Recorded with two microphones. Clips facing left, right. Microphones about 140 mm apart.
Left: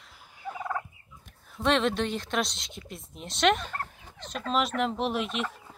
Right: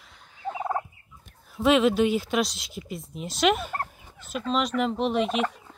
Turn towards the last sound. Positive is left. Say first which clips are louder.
# right 6 dB
turn(degrees=0)  # may be behind; listen again after turning